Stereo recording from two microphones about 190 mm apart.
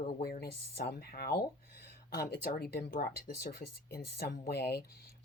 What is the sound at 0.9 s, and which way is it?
Speech, 55° left (ahead or behind).